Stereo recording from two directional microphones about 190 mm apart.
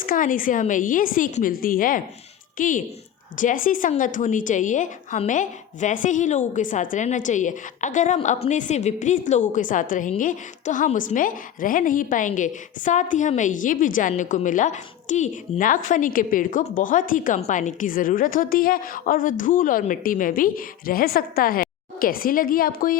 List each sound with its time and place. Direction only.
0.0 s a woman's voice: 45° left (ahead or behind)